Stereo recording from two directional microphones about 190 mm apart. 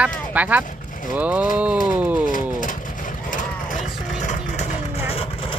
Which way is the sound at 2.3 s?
45° left (ahead or behind).